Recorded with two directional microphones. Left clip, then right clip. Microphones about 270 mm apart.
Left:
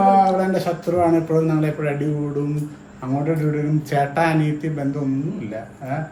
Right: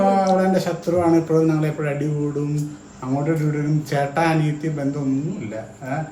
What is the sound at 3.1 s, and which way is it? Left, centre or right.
A man's voice, centre.